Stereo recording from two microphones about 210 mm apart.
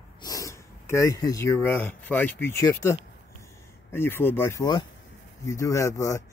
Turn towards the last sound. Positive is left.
turn(degrees=15)  # may be behind; listen again after turning